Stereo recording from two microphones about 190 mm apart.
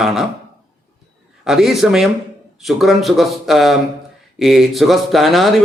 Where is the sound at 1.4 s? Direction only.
Centre (ahead or behind).